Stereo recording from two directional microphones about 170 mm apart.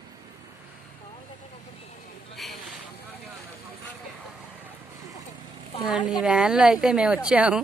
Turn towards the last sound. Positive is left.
turn(degrees=-5)  # may be behind; listen again after turning